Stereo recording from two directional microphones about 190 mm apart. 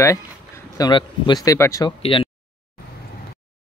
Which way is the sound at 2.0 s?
30° left (ahead or behind).